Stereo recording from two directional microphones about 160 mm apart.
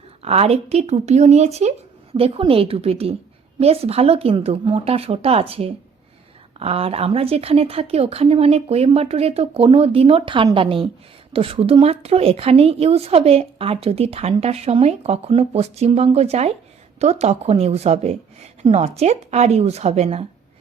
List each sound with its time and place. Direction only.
0.2 s speech: 40° right (ahead or behind)